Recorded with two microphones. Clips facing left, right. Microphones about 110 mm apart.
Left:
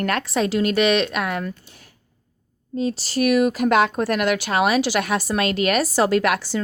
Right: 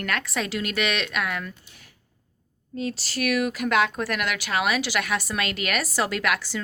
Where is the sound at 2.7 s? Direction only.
25° left (ahead or behind).